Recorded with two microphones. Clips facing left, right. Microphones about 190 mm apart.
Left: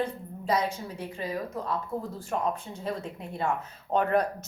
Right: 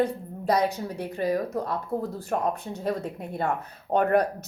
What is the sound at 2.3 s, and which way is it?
A woman's voice, 50° right (ahead or behind).